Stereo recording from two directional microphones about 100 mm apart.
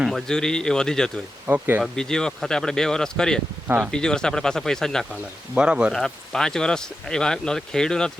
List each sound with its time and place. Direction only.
0.0 s speech: centre (ahead or behind)
1.5 s speech: 20° right (ahead or behind)
1.8 s speech: 5° left (ahead or behind)
5.5 s speech: 10° right (ahead or behind)
5.9 s speech: 5° left (ahead or behind)